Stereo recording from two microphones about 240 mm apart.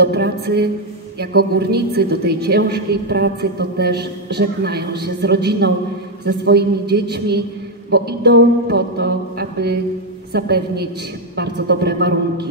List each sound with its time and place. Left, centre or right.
0.0 s a woman's voice: right